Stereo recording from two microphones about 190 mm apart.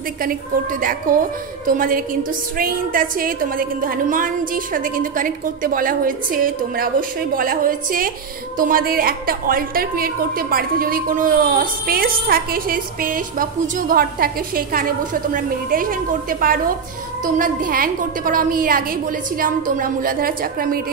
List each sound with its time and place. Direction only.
0.2 s a woman's voice: 50° right (ahead or behind)